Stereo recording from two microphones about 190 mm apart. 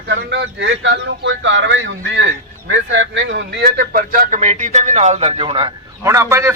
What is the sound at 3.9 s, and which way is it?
A man's voice, 50° right (ahead or behind).